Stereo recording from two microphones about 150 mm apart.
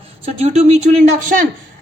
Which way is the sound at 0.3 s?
45° right (ahead or behind).